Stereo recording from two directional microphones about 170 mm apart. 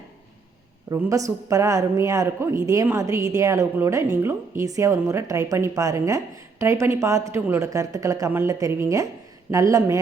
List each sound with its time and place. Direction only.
0.9 s a woman's voice: 20° right (ahead or behind)